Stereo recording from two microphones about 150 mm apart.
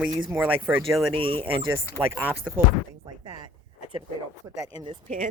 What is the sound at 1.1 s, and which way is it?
Speech, 35° right (ahead or behind).